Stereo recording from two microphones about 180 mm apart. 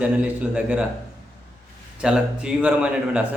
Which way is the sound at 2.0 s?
5° right (ahead or behind).